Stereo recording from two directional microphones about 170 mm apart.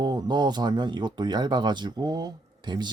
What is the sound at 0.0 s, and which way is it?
Speech, 25° right (ahead or behind).